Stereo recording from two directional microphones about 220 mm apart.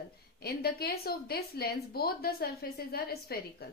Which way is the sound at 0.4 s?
45° left (ahead or behind).